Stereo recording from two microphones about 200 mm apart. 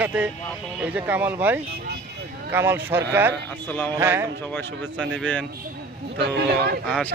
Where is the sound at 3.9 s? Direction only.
10° right (ahead or behind).